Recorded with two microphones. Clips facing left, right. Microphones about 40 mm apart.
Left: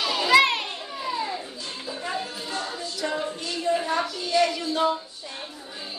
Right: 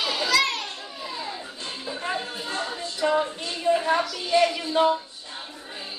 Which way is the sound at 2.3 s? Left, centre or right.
Right.